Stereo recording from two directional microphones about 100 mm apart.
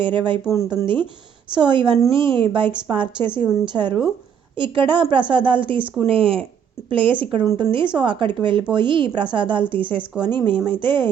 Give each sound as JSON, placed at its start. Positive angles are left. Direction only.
{"t": 0.0, "sound": "a woman's voice", "side_deg": -55}